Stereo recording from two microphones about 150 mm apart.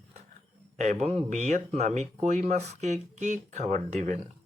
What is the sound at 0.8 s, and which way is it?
Speech, 50° right (ahead or behind).